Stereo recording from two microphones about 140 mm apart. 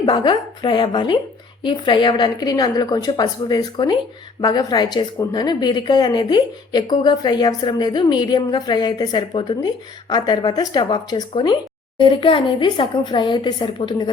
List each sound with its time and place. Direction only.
0.0 s a woman's voice: 35° left (ahead or behind)